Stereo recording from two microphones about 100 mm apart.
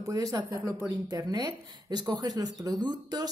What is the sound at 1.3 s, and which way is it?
Speech, 45° right (ahead or behind).